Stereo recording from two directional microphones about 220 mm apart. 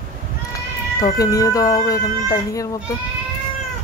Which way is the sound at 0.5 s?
15° left (ahead or behind).